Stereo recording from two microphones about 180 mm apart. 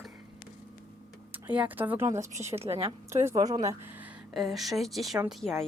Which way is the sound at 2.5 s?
35° right (ahead or behind).